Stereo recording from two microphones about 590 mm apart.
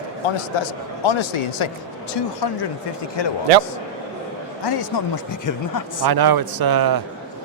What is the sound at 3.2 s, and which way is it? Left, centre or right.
Speech, left.